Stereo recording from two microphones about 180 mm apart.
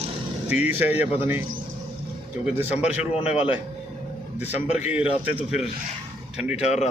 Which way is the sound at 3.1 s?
35° left (ahead or behind).